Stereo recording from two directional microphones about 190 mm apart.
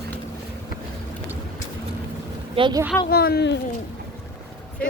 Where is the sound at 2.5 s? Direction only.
25° right (ahead or behind).